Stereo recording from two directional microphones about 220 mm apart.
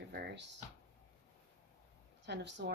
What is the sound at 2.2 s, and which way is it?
Speech, 50° right (ahead or behind).